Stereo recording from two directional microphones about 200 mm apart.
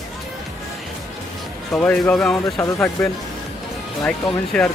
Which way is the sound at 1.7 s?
5° left (ahead or behind).